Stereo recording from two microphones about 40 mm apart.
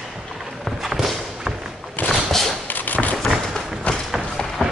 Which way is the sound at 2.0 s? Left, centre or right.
Left.